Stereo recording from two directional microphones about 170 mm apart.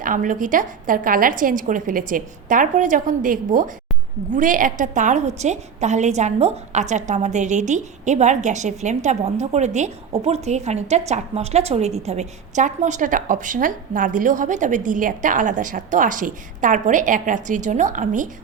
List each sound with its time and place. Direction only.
0.0 s a woman's voice: 50° right (ahead or behind)